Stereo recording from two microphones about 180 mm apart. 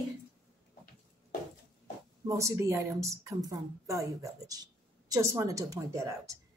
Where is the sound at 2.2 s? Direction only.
15° right (ahead or behind).